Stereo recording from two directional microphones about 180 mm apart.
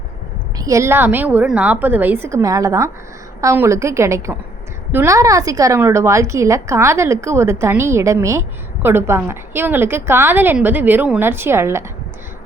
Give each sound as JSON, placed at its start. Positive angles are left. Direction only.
{"t": 0.6, "sound": "a woman's voice", "side_deg": -15}